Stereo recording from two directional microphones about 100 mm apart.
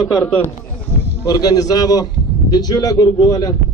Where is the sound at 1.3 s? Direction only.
40° left (ahead or behind).